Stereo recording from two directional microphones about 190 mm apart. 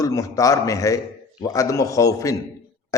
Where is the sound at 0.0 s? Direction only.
15° left (ahead or behind).